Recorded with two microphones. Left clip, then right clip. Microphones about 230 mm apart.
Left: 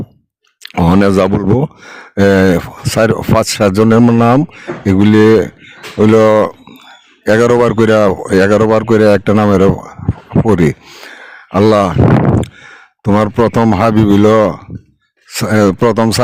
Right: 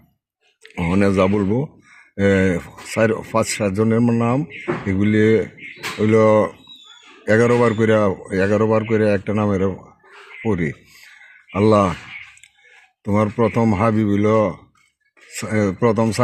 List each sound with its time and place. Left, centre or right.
0.6 s speech: left
13.1 s speech: left